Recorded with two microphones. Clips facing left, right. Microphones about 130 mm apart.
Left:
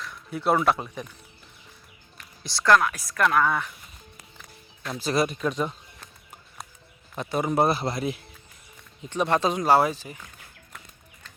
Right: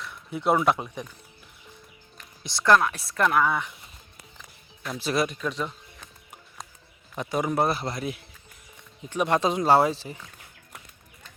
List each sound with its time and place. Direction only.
0.3 s speech: 20° right (ahead or behind)
2.4 s speech: 20° right (ahead or behind)
3.2 s speech: 15° right (ahead or behind)
4.4 s music: centre (ahead or behind)
7.2 s speech: 15° right (ahead or behind)
7.6 s a man's voice: 30° left (ahead or behind)
9.0 s speech: 10° right (ahead or behind)